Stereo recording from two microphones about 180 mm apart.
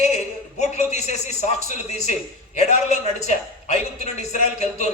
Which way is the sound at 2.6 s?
40° left (ahead or behind).